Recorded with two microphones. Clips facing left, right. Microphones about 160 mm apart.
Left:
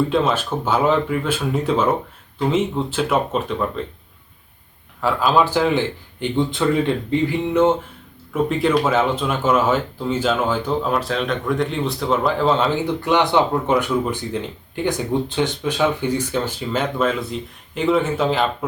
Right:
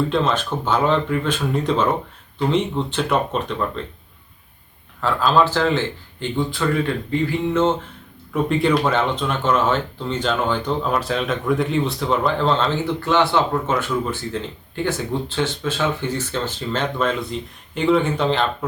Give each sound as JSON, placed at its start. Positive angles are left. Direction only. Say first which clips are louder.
{"t": 0.1, "sound": "speech", "louder": "left 1 dB", "side_deg": 5}
{"t": 4.9, "sound": "speech", "louder": "even", "side_deg": 10}
{"t": 8.3, "sound": "speech", "louder": "even", "side_deg": 0}